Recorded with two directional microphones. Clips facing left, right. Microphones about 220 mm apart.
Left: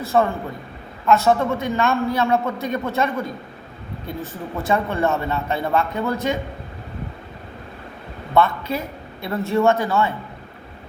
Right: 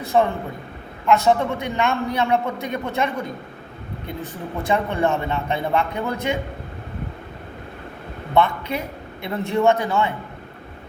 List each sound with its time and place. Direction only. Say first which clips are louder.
0.0 s a man's voice: even; 15° right (ahead or behind)
4.6 s a man's voice: even; 15° right (ahead or behind)
8.4 s a man's voice: left 1 dB; 15° right (ahead or behind)